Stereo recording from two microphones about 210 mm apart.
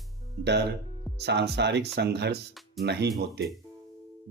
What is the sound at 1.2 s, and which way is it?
Speech, 55° right (ahead or behind).